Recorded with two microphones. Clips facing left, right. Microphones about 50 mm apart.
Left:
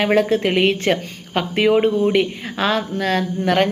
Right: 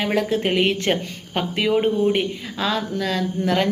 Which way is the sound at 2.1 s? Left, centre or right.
Left.